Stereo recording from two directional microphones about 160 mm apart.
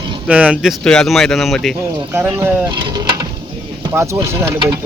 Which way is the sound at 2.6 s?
25° right (ahead or behind).